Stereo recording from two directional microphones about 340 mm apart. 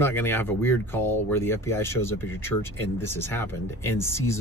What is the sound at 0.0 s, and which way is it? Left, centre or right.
Speech, centre.